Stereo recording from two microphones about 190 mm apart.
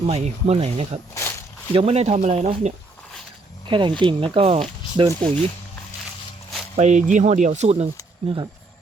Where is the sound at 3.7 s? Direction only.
25° right (ahead or behind).